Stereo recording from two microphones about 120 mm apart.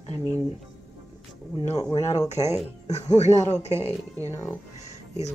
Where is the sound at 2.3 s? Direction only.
65° left (ahead or behind).